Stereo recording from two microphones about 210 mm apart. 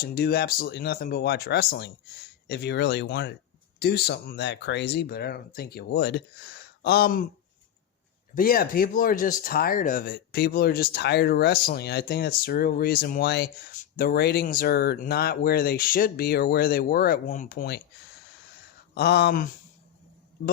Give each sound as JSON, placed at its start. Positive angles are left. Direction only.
{"t": 0.0, "sound": "speech", "side_deg": 45}
{"t": 8.4, "sound": "speech", "side_deg": 45}
{"t": 18.9, "sound": "speech", "side_deg": 50}